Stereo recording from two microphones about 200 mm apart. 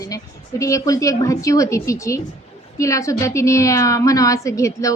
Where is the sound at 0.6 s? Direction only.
15° left (ahead or behind).